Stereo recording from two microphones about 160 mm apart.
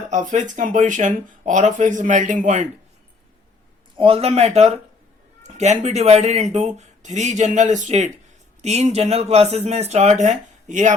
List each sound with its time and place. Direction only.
0.1 s speech: 50° right (ahead or behind)
3.9 s speech: 35° right (ahead or behind); by 10.9 s 50° right (ahead or behind)